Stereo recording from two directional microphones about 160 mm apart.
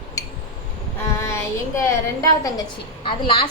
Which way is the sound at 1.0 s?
15° left (ahead or behind).